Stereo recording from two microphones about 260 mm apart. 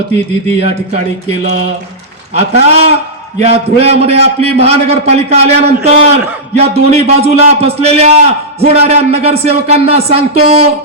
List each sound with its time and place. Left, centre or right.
2.3 s speech: right